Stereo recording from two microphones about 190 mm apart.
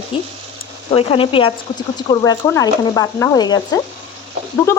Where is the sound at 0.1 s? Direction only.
30° left (ahead or behind).